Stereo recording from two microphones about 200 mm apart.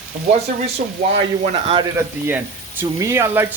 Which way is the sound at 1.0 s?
30° right (ahead or behind).